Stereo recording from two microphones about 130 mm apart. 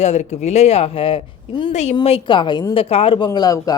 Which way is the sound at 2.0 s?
40° left (ahead or behind).